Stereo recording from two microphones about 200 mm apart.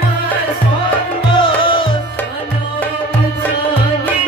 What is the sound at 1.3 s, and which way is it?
Music, 25° left (ahead or behind).